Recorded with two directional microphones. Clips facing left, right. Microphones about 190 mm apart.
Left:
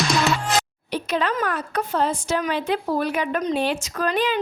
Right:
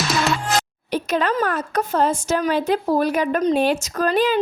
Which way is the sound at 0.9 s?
45° right (ahead or behind).